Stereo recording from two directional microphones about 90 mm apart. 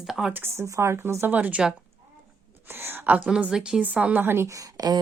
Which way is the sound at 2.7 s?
25° right (ahead or behind).